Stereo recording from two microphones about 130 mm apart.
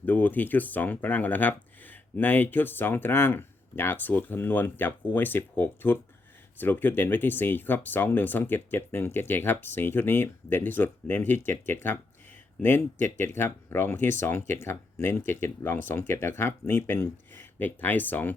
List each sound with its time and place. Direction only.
0.0 s speech: 15° left (ahead or behind)